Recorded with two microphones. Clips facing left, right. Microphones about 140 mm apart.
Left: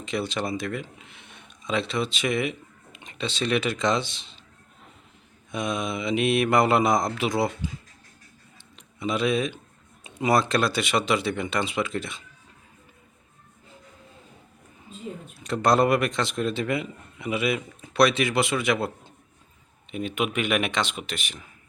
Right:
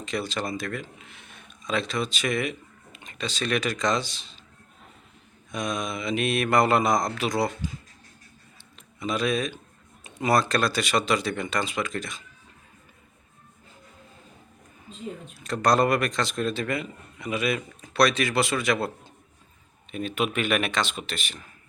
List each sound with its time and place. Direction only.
0.0 s speech: 20° left (ahead or behind)
5.5 s speech: 25° left (ahead or behind)
9.0 s speech: 20° left (ahead or behind)
15.4 s speech: 20° left (ahead or behind)
19.9 s speech: 20° left (ahead or behind)